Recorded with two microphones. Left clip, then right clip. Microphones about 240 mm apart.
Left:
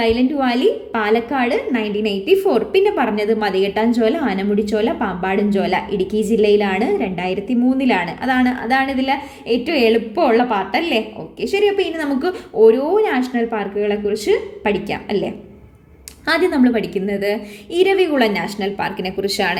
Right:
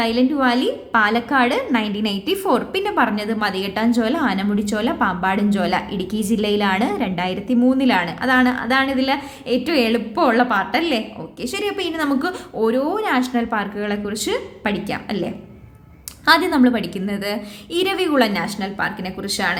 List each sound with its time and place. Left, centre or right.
0.0 s a woman's voice: centre